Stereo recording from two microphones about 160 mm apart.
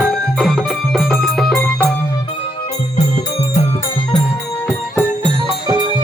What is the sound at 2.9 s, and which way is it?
Music, 45° left (ahead or behind).